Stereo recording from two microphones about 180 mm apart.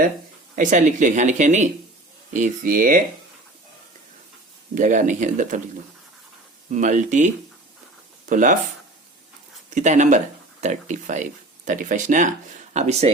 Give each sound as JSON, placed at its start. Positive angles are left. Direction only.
{"t": 0.5, "sound": "speech", "side_deg": -45}
{"t": 4.7, "sound": "speech", "side_deg": -45}
{"t": 6.7, "sound": "speech", "side_deg": -45}
{"t": 8.3, "sound": "speech", "side_deg": -45}
{"t": 9.7, "sound": "speech", "side_deg": -45}